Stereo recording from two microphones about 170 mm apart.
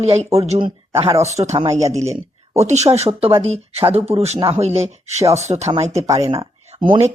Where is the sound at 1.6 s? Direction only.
20° right (ahead or behind).